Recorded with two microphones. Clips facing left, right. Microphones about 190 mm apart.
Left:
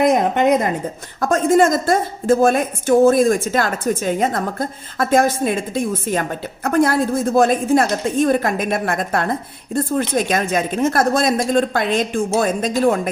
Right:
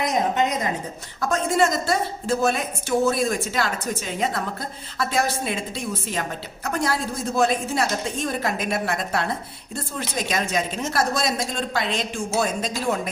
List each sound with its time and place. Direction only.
0.0 s a woman's voice: 55° left (ahead or behind)